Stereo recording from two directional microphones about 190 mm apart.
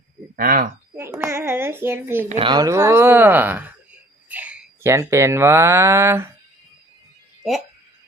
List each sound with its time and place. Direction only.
0.3 s speech: 50° right (ahead or behind)
0.9 s speech: 15° right (ahead or behind)
2.3 s speech: 25° right (ahead or behind)